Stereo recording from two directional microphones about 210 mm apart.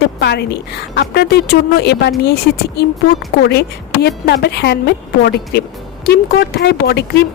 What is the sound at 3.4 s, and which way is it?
Speech, 50° left (ahead or behind).